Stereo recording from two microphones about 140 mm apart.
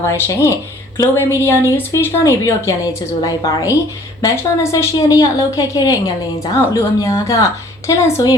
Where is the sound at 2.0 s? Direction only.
25° left (ahead or behind).